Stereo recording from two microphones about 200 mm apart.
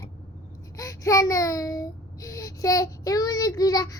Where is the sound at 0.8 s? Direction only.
15° left (ahead or behind).